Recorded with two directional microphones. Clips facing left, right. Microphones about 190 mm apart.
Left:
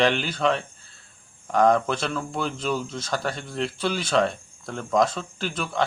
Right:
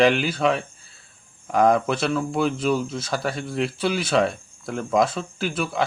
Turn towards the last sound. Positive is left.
turn(degrees=-10)  # may be behind; listen again after turning